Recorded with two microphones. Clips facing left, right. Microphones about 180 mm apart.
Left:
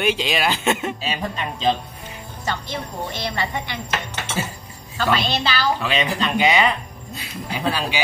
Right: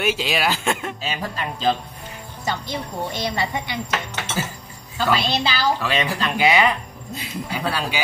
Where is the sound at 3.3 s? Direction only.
15° right (ahead or behind).